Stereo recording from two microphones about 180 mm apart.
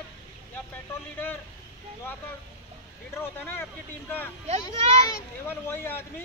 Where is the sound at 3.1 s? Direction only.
10° left (ahead or behind).